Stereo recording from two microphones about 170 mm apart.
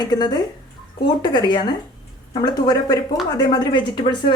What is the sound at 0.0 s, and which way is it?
A woman's voice, 25° left (ahead or behind).